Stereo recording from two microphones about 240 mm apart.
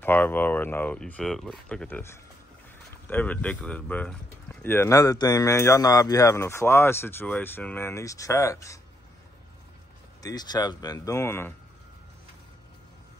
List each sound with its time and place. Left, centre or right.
0.0 s speech: centre
10.2 s speech: centre